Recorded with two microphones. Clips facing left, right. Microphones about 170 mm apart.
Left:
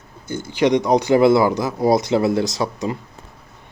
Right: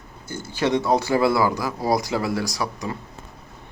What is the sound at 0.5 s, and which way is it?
Speech, 15° left (ahead or behind).